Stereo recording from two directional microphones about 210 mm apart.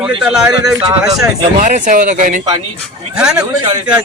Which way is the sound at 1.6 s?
35° right (ahead or behind).